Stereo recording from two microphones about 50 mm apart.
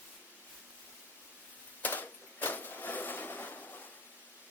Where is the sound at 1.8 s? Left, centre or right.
Left.